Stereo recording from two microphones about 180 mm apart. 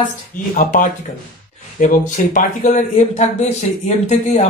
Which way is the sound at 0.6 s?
45° left (ahead or behind).